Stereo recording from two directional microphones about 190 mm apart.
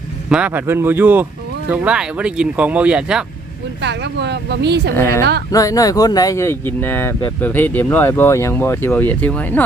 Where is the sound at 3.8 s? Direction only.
65° right (ahead or behind).